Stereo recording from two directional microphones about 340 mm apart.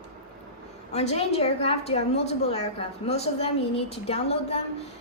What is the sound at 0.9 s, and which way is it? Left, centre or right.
A woman's voice, centre.